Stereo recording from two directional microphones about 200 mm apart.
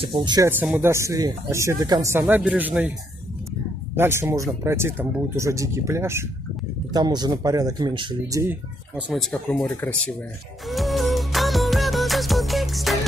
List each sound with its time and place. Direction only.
0.0 s speech: 25° right (ahead or behind)
0.5 s speech: 10° right (ahead or behind)
3.9 s speech: 10° right (ahead or behind); by 10.1 s 5° left (ahead or behind)
10.7 s music: centre (ahead or behind)